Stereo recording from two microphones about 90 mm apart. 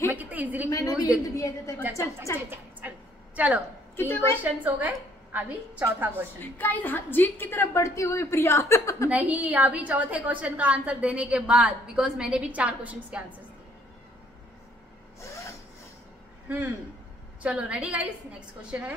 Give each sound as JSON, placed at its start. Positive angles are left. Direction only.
{"t": 0.1, "sound": "a sound", "side_deg": -20}
{"t": 0.7, "sound": "a woman's voice", "side_deg": 40}
{"t": 0.9, "sound": "a woman's voice", "side_deg": -15}
{"t": 1.3, "sound": "a woman's voice", "side_deg": 35}
{"t": 3.3, "sound": "a woman's voice", "side_deg": -15}
{"t": 3.9, "sound": "a woman's voice", "side_deg": 30}
{"t": 4.6, "sound": "a woman's voice", "side_deg": -15}
{"t": 6.6, "sound": "a woman's voice", "side_deg": 20}
{"t": 9.1, "sound": "a woman's voice", "side_deg": -15}
{"t": 17.4, "sound": "a woman's voice", "side_deg": -10}